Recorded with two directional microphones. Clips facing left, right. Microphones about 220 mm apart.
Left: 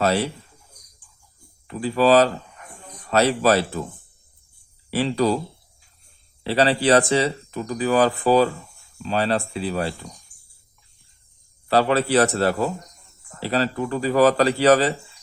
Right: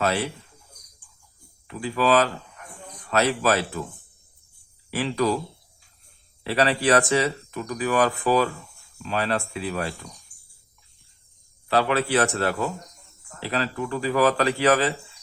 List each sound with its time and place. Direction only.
0.0 s speech: 35° left (ahead or behind)
1.6 s speech: 40° left (ahead or behind)
4.9 s speech: 35° left (ahead or behind)
6.4 s speech: 30° left (ahead or behind)
11.7 s speech: 35° left (ahead or behind)